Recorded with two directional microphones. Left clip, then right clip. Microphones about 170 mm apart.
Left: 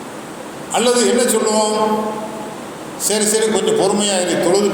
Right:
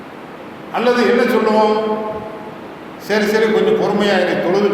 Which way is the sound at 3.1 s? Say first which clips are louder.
Right 2 dB; 20° left (ahead or behind).